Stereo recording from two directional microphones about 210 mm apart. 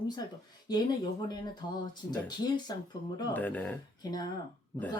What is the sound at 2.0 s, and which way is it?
Speech, 20° left (ahead or behind).